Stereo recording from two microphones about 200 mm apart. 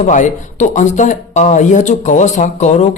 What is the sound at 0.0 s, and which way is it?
Speech, 35° left (ahead or behind).